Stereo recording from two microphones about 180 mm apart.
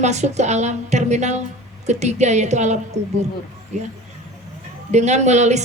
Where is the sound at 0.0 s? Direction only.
40° right (ahead or behind).